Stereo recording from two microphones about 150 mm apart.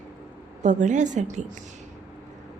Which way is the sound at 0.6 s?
55° right (ahead or behind).